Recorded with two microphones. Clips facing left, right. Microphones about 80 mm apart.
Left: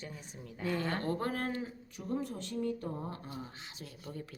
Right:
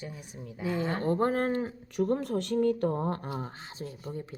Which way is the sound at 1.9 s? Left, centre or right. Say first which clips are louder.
Right 10 dB; right.